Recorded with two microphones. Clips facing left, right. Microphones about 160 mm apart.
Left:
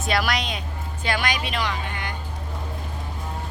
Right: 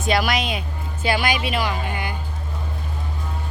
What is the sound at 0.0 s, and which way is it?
A woman's voice, centre (ahead or behind).